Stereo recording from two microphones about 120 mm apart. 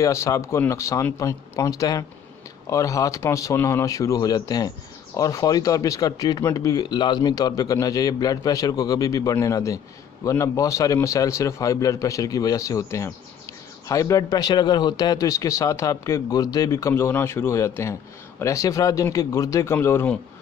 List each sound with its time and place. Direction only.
0.0 s speech: 25° left (ahead or behind)